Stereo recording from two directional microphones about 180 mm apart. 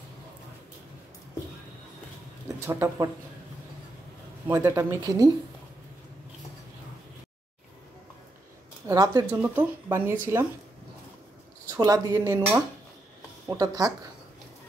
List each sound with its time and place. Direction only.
2.4 s speech: 15° right (ahead or behind)
4.5 s speech: 15° right (ahead or behind)
8.8 s speech: 20° right (ahead or behind)
9.3 s speech: 10° right (ahead or behind)
11.7 s speech: 20° right (ahead or behind)